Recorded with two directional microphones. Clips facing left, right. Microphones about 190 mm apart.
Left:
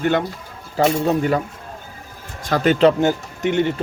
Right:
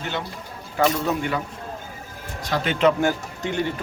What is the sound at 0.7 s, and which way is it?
Speech, 30° left (ahead or behind).